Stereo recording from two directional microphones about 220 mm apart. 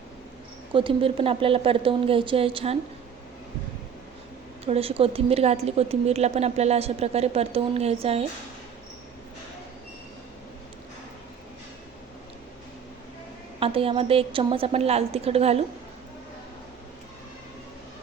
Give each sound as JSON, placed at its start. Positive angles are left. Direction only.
{"t": 0.7, "sound": "a woman's voice", "side_deg": -25}
{"t": 4.6, "sound": "a woman's voice", "side_deg": -25}
{"t": 13.6, "sound": "a woman's voice", "side_deg": -25}